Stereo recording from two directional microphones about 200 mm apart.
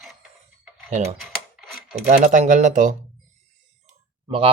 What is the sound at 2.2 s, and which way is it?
Speech, 40° right (ahead or behind).